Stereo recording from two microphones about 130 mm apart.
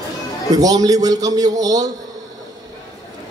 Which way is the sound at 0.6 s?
30° right (ahead or behind).